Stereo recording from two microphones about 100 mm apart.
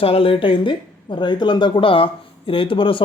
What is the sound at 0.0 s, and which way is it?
Speech, 70° left (ahead or behind).